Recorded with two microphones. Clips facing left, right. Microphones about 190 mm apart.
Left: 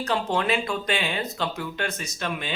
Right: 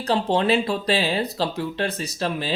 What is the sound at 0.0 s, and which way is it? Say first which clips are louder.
Speech: right 4 dB; 30° right (ahead or behind).